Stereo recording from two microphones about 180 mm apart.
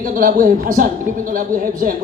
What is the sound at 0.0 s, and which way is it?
A man's voice, 50° right (ahead or behind).